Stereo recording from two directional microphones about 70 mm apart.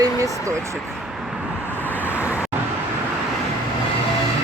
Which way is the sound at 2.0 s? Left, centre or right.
Right.